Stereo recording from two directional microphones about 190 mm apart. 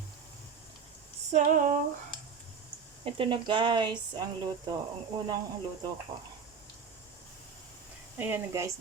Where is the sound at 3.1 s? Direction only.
25° right (ahead or behind).